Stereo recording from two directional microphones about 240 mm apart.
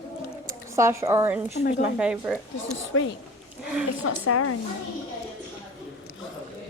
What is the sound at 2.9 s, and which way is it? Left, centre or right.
A woman's voice, left.